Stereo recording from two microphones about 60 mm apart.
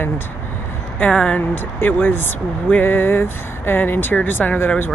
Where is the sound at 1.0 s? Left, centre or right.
Left.